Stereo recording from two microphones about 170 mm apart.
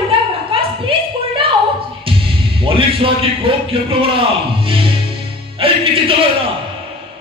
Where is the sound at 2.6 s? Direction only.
30° right (ahead or behind).